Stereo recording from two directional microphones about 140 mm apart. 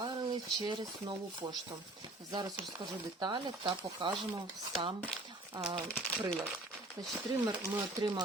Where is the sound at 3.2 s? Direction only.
35° right (ahead or behind).